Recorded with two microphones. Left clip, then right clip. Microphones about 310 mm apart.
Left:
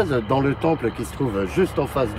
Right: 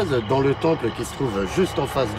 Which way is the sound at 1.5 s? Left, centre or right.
Right.